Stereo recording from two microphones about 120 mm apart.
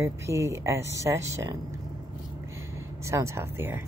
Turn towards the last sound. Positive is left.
turn(degrees=-20)  # may be behind; listen again after turning